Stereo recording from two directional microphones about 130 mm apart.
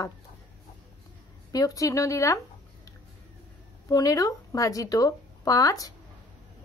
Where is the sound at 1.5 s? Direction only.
25° left (ahead or behind).